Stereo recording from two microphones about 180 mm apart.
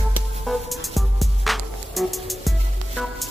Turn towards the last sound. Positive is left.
turn(degrees=0)  # may be behind; listen again after turning